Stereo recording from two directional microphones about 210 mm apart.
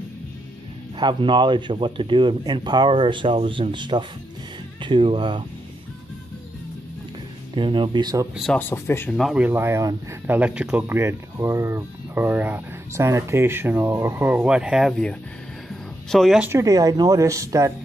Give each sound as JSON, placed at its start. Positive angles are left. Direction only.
{"t": 0.9, "sound": "speech", "side_deg": -20}
{"t": 7.5, "sound": "speech", "side_deg": -25}
{"t": 8.4, "sound": "speech", "side_deg": 5}
{"t": 9.1, "sound": "speech", "side_deg": 0}